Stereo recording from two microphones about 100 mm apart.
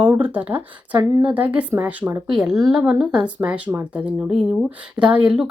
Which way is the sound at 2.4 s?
5° right (ahead or behind).